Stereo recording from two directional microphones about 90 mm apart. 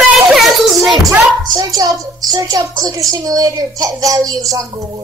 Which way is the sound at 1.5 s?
45° right (ahead or behind).